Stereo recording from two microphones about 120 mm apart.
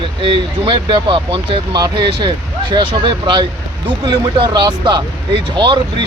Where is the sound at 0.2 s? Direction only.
45° right (ahead or behind).